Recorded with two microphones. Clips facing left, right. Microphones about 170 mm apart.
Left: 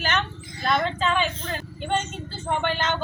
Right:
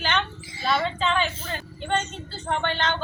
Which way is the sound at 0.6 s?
5° right (ahead or behind).